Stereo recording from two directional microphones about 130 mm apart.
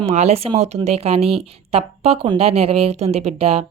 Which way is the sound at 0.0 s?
55° right (ahead or behind).